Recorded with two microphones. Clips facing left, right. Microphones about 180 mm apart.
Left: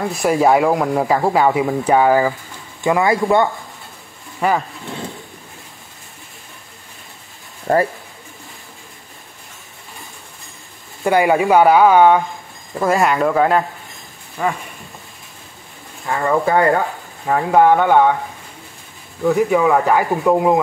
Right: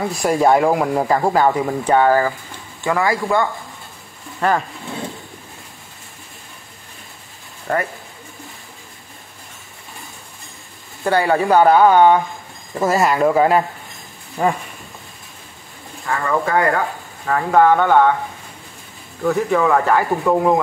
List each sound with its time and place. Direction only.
0.0 s speech: centre (ahead or behind)
2.8 s speech: 20° left (ahead or behind)
4.4 s speech: 5° left (ahead or behind)
7.7 s speech: 30° left (ahead or behind)
11.1 s speech: 15° left (ahead or behind); by 13.7 s 10° right (ahead or behind)
14.4 s speech: 25° right (ahead or behind)
16.1 s speech: 20° left (ahead or behind)
17.3 s speech: 15° left (ahead or behind)
19.2 s speech: 10° left (ahead or behind)